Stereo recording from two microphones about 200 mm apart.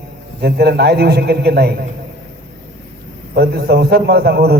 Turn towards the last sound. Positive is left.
turn(degrees=-55)  # may be behind; listen again after turning